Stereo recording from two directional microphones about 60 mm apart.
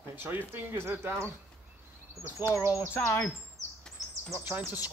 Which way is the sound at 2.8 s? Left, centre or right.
Left.